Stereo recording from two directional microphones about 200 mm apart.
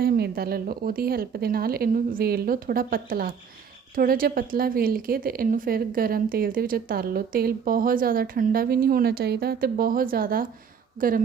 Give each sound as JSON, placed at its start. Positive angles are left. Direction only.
{"t": 0.0, "sound": "a woman's voice", "side_deg": -50}